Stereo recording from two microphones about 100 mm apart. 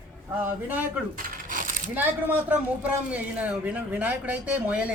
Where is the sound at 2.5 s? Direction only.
15° right (ahead or behind).